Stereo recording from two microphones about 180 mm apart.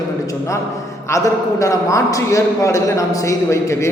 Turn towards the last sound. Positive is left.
turn(degrees=15)  # may be behind; listen again after turning